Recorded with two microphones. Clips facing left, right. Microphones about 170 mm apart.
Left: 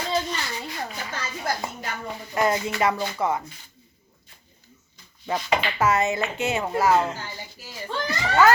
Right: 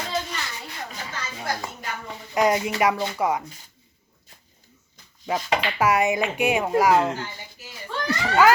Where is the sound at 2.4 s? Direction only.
15° right (ahead or behind).